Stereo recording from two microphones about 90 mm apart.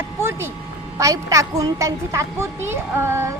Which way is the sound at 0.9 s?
40° right (ahead or behind).